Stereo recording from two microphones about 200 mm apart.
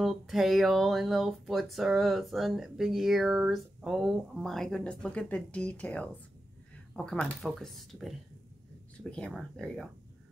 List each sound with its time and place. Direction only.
0.0 s speech: centre (ahead or behind)